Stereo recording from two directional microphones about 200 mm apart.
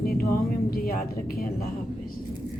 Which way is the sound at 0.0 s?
50° left (ahead or behind).